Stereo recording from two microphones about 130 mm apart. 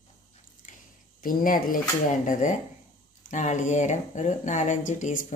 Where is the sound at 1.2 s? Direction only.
90° left.